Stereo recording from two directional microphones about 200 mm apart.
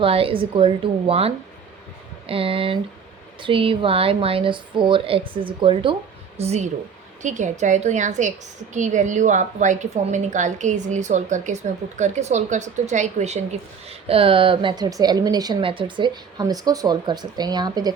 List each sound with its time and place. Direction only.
0.0 s a woman's voice: 25° right (ahead or behind)